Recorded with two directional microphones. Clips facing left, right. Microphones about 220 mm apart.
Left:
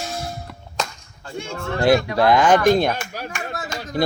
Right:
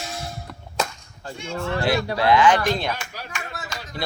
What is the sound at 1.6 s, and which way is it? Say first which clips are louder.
A man's voice: left 6 dB; 45° left (ahead or behind).